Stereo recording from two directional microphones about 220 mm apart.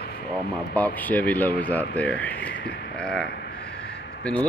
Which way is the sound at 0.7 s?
5° left (ahead or behind).